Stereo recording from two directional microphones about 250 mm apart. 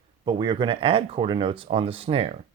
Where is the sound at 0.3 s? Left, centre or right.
Centre.